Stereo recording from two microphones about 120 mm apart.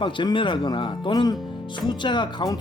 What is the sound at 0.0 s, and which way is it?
Speech, 40° left (ahead or behind).